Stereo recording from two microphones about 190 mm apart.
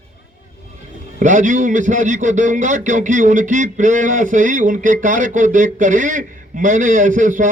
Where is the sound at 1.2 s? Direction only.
40° right (ahead or behind).